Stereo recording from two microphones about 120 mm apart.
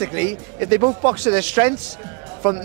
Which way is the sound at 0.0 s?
20° right (ahead or behind).